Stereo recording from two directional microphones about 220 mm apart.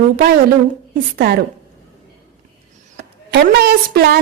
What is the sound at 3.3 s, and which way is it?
Speech, 45° right (ahead or behind).